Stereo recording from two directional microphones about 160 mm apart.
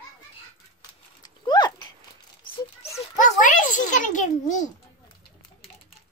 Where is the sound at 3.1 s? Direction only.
55° left (ahead or behind).